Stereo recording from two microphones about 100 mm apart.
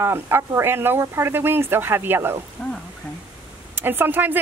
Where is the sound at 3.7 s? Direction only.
20° right (ahead or behind).